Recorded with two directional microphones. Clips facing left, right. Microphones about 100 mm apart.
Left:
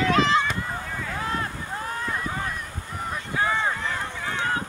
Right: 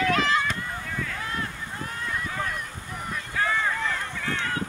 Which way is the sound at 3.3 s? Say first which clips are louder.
Left 1 dB; 25° left (ahead or behind).